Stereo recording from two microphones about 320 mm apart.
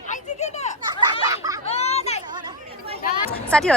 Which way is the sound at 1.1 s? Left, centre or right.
Centre.